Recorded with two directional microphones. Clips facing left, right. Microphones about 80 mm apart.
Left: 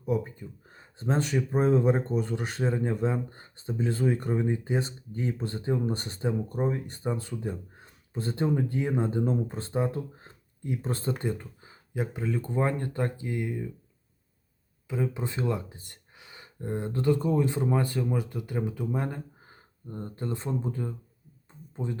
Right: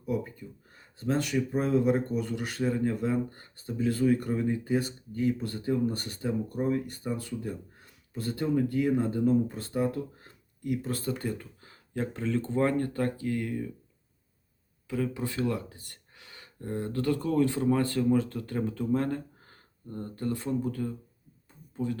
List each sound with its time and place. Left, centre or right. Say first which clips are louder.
0.0 s speech: left 3 dB; left
14.8 s speech: even; left